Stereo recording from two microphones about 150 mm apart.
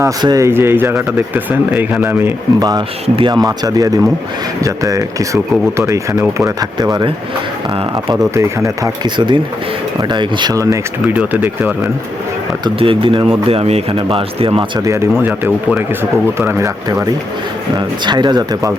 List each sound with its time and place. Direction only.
0.0 s speech: 25° right (ahead or behind)
8.4 s speech: 20° right (ahead or behind)
11.0 s speech: 10° right (ahead or behind)
12.6 s speech: 35° right (ahead or behind)
14.8 s speech: 15° right (ahead or behind)
18.0 s speech: 30° right (ahead or behind)